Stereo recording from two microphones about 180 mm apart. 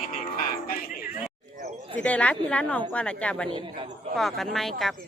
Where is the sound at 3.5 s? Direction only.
30° right (ahead or behind).